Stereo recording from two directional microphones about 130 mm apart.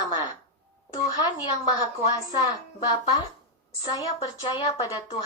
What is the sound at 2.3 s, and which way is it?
A woman's voice, 30° left (ahead or behind).